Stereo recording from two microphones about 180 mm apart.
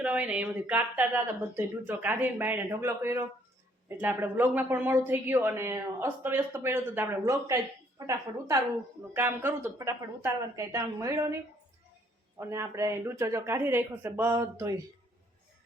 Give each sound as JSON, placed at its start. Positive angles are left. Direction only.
{"t": 0.0, "sound": "speech", "side_deg": -10}
{"t": 12.4, "sound": "speech", "side_deg": -15}